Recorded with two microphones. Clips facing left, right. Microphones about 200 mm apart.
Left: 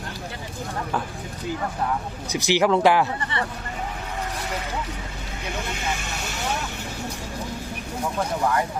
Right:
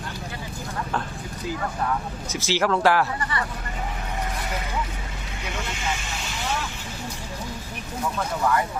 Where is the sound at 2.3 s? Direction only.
15° left (ahead or behind).